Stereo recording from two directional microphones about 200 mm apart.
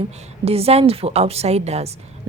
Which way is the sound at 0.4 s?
30° right (ahead or behind).